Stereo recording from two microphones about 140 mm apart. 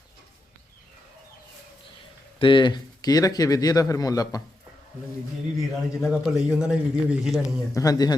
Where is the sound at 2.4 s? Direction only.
35° left (ahead or behind).